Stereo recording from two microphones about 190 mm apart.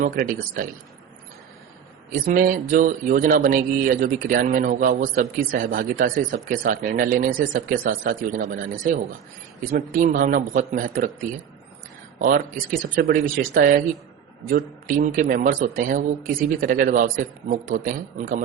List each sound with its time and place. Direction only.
0.0 s speech: 45° right (ahead or behind)
2.0 s speech: 45° right (ahead or behind)
13.0 s speech: 50° right (ahead or behind)